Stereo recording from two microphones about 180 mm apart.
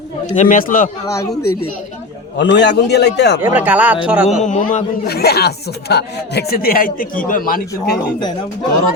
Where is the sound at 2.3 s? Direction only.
75° left (ahead or behind).